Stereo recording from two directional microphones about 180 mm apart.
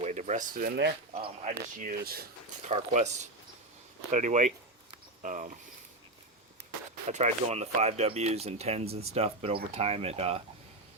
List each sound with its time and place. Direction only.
0.0 s speech: 40° right (ahead or behind)
1.1 s speech: 35° right (ahead or behind); by 2.2 s 55° right (ahead or behind)
2.6 s speech: 40° right (ahead or behind)
4.1 s speech: 45° right (ahead or behind)
7.1 s speech: 40° right (ahead or behind)